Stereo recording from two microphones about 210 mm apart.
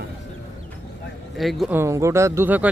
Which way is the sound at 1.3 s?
Centre (ahead or behind).